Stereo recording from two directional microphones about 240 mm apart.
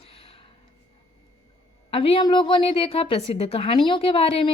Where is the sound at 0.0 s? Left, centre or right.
Left.